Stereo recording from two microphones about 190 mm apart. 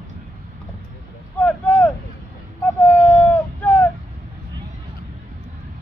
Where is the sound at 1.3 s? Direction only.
10° left (ahead or behind).